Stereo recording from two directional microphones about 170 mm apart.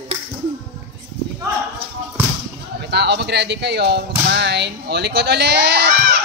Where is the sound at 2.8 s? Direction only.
80° right.